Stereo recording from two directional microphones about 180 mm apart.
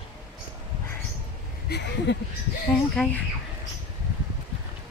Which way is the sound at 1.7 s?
65° left (ahead or behind).